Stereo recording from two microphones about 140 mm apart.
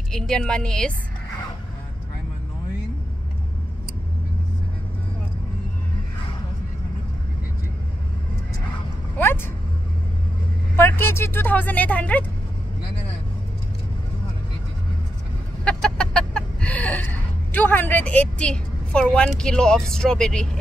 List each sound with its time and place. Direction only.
0.1 s a woman's voice: 5° left (ahead or behind)
9.2 s speech: 15° left (ahead or behind)
10.8 s speech: 15° left (ahead or behind)
15.6 s chicken: 5° left (ahead or behind)